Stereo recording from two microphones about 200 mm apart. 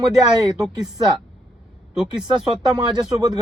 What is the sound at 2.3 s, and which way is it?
Speech, 20° right (ahead or behind).